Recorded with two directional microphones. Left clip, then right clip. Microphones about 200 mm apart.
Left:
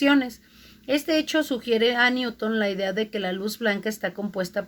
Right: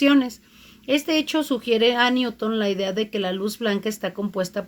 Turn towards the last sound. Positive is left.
turn(degrees=-45)  # may be behind; listen again after turning